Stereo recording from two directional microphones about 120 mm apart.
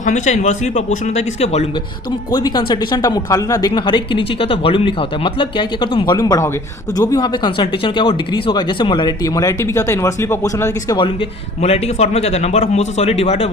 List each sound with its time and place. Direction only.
0.0 s speech: 85° left; by 1.6 s 65° left (ahead or behind)
2.3 s speech: 35° left (ahead or behind)
6.1 s speech: 30° left (ahead or behind)
10.9 s speech: 45° left (ahead or behind)
11.6 s speech: 65° left (ahead or behind)